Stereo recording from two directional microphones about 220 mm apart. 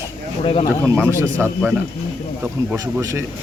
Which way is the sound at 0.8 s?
10° right (ahead or behind).